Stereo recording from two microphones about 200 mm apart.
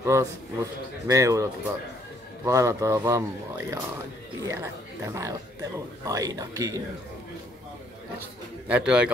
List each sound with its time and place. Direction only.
0.0 s speech: 15° right (ahead or behind)
8.6 s a man's voice: 5° right (ahead or behind)